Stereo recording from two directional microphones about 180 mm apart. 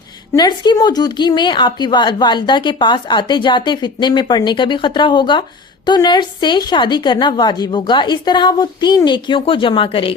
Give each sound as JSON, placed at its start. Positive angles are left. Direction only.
{"t": 0.3, "sound": "a woman's voice", "side_deg": 25}